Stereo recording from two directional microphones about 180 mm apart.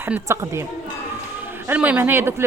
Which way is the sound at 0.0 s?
15° right (ahead or behind).